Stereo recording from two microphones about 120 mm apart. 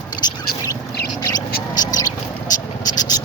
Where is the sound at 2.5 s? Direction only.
35° left (ahead or behind).